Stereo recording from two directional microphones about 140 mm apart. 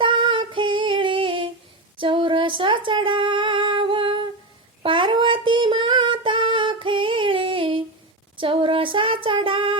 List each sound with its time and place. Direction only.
0.0 s female singing: 35° right (ahead or behind)
2.0 s a sound: 40° right (ahead or behind)
4.8 s child singing: 35° right (ahead or behind)
8.4 s female singing: 40° right (ahead or behind)